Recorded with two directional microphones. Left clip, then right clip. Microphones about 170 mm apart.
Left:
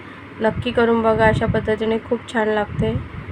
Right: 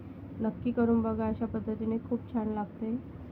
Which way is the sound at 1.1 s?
25° left (ahead or behind).